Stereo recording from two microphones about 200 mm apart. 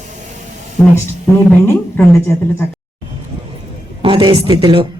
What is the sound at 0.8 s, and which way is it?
A woman's voice, 5° left (ahead or behind).